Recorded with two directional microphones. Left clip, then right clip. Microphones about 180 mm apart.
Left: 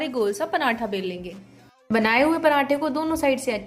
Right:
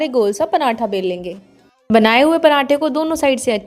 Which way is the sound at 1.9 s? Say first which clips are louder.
Right 8 dB; 45° right (ahead or behind).